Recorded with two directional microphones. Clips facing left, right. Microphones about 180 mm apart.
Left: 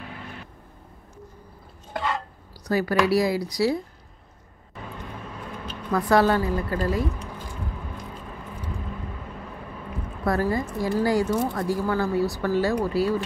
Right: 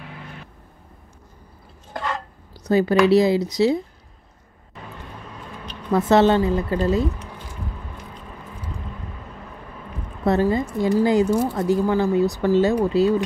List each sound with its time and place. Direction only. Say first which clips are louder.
2.6 s speech: right 6 dB; 25° right (ahead or behind)
5.9 s speech: right 4 dB; 25° right (ahead or behind)
10.2 s speech: right 5 dB; 25° right (ahead or behind)